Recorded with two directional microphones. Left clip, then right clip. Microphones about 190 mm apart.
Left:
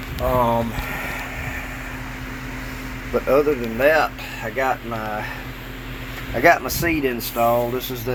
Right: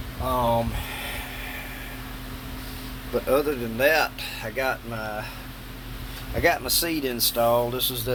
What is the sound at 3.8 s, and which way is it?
Speech, 20° right (ahead or behind).